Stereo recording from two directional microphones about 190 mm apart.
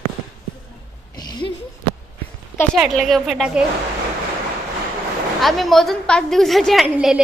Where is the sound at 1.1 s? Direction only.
20° left (ahead or behind).